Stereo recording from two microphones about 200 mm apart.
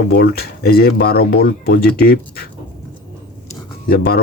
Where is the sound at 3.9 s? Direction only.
50° left (ahead or behind).